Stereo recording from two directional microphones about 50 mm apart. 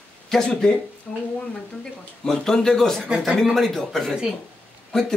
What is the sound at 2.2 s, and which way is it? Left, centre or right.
Speech, centre.